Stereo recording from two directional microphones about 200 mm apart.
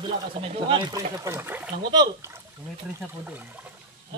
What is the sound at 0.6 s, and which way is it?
Speech, 20° right (ahead or behind).